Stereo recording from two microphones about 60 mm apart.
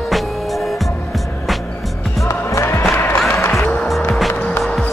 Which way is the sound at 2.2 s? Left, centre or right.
Left.